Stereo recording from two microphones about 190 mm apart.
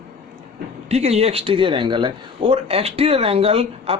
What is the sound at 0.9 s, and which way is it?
Speech, 35° right (ahead or behind).